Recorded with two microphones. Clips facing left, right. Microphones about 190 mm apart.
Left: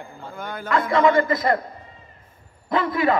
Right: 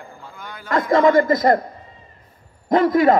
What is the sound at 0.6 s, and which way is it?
Speech, 40° right (ahead or behind).